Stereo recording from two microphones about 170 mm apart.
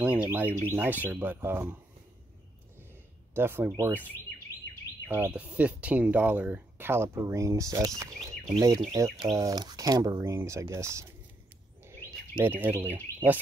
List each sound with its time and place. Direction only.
0.0 s speech: 10° right (ahead or behind)
3.3 s speech: 15° right (ahead or behind)
5.0 s speech: 10° right (ahead or behind)
11.8 s a sound: 15° right (ahead or behind)